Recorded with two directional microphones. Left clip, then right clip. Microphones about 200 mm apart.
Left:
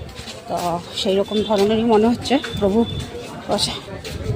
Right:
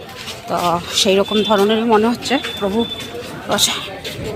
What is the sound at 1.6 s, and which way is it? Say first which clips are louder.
Speech: right 2 dB; 15° left (ahead or behind).